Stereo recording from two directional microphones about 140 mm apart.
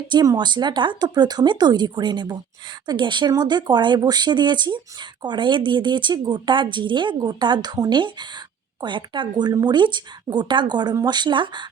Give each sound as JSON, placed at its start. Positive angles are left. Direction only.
{"t": 0.1, "sound": "speech", "side_deg": -30}